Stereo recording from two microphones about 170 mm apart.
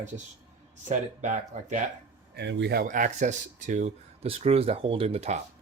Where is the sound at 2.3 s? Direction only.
90° right.